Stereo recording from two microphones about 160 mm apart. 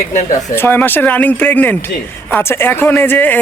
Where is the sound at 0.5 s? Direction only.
15° left (ahead or behind).